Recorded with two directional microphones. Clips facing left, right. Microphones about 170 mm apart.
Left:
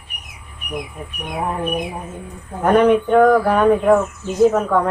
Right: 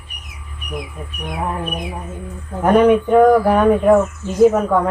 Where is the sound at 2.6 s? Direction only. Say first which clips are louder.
Right 1 dB; 10° right (ahead or behind).